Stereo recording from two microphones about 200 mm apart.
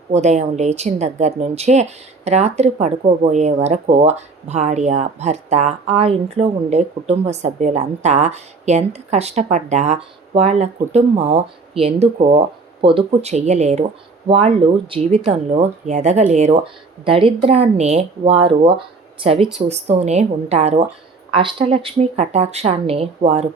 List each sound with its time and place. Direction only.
0.1 s speech: 35° right (ahead or behind)